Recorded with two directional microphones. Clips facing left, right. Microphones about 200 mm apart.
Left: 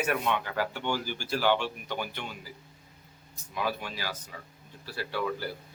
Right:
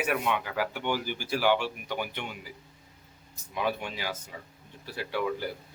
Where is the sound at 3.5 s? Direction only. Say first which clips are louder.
Right 2 dB; 20° right (ahead or behind).